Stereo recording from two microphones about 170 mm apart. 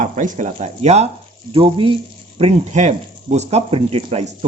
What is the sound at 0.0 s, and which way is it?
Speech, 45° right (ahead or behind).